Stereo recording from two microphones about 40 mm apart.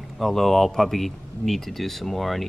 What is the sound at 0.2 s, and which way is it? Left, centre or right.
Speech, centre.